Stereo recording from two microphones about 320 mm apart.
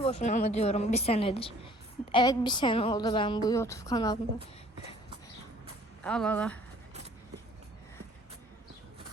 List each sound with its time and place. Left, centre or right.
0.0 s a woman's voice: centre
6.0 s speech: centre